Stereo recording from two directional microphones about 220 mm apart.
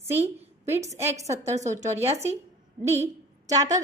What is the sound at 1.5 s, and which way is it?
Speech, 30° right (ahead or behind).